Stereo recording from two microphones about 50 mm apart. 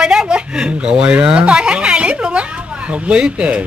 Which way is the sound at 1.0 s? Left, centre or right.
Right.